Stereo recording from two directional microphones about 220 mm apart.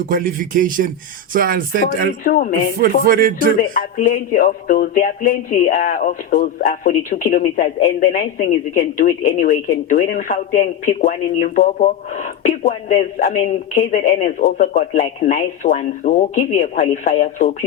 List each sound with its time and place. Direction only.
0.1 s speech: 40° right (ahead or behind)
2.2 s speech: 40° left (ahead or behind)
2.8 s speech: 40° right (ahead or behind)
3.6 s speech: 35° left (ahead or behind)